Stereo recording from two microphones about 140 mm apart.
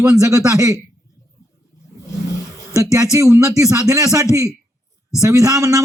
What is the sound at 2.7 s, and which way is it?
A man's voice, 25° right (ahead or behind).